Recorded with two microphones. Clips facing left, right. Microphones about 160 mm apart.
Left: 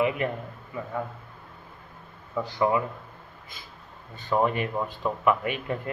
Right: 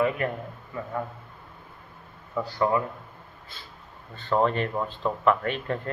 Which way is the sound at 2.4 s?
15° left (ahead or behind).